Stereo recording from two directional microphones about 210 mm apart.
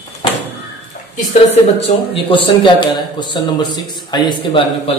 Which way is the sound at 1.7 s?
25° left (ahead or behind).